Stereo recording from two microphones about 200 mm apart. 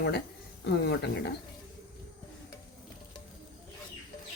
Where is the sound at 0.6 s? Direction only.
60° left (ahead or behind).